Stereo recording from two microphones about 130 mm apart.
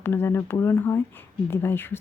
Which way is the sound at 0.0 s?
20° left (ahead or behind).